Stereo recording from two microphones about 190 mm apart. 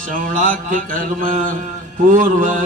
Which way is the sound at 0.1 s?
45° right (ahead or behind).